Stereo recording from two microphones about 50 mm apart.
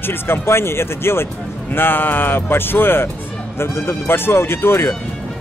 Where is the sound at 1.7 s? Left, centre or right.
Left.